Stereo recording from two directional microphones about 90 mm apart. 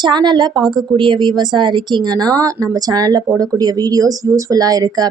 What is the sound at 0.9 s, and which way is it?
A woman's voice, 60° right (ahead or behind).